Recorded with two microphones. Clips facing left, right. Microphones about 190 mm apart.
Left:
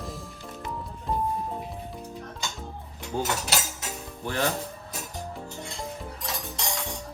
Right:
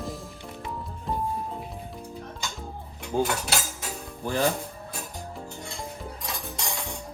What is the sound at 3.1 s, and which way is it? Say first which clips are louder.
Speech: right 4 dB; 15° right (ahead or behind).